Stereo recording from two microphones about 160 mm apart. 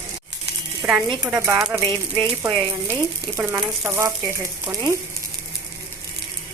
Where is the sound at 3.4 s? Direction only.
15° right (ahead or behind).